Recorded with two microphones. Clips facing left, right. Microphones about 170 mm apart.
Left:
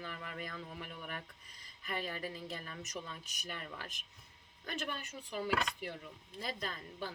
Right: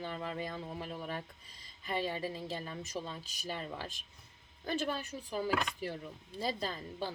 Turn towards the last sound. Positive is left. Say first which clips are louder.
# right 4 dB
turn(degrees=-30)  # may be behind; listen again after turning